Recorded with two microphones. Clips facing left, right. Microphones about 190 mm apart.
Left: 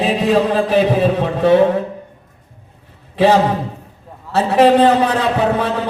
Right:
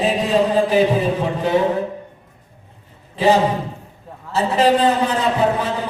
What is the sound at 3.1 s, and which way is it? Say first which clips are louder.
A man's voice: left 3 dB; 70° left (ahead or behind).